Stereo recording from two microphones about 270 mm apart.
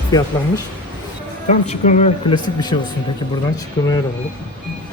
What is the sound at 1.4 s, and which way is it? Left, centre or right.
Speech, left.